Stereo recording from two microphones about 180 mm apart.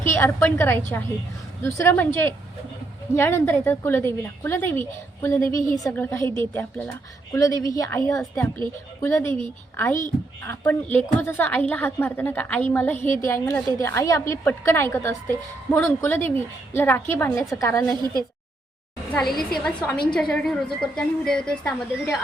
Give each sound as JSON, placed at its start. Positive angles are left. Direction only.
{"t": 0.0, "sound": "a woman's voice", "side_deg": 15}
{"t": 8.2, "sound": "speech", "side_deg": 5}
{"t": 9.0, "sound": "speech", "side_deg": 15}
{"t": 10.4, "sound": "a woman's voice", "side_deg": 15}
{"t": 18.0, "sound": "speech", "side_deg": -20}
{"t": 19.1, "sound": "speech", "side_deg": 0}